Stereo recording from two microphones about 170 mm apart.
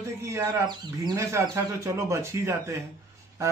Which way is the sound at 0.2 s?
20° right (ahead or behind).